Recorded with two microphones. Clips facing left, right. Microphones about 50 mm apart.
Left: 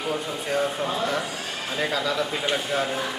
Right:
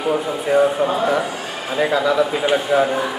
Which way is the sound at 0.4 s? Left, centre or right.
Centre.